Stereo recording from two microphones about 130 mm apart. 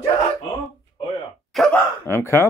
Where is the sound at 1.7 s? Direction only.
20° left (ahead or behind).